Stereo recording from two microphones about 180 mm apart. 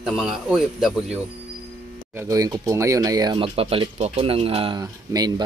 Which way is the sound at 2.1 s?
20° right (ahead or behind).